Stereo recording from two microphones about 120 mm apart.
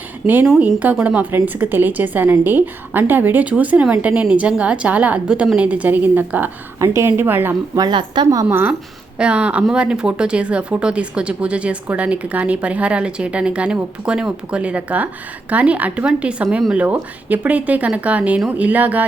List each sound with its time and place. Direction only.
0.2 s a woman's voice: centre (ahead or behind)
0.6 s a woman's voice: 15° right (ahead or behind)
7.8 s a woman's voice: 40° right (ahead or behind)
8.4 s a woman's voice: 20° right (ahead or behind)